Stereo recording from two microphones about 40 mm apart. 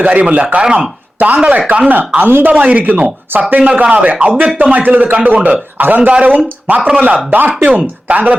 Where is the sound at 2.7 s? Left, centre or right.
Right.